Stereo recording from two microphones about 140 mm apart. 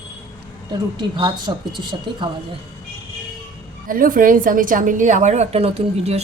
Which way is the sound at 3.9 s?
80° right.